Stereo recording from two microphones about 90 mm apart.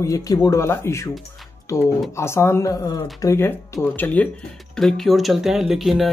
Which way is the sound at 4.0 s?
15° left (ahead or behind).